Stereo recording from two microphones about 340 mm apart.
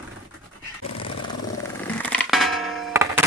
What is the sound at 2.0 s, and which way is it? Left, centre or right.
Music, centre.